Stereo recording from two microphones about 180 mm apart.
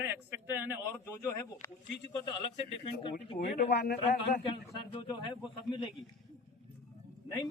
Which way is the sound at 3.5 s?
70° left (ahead or behind).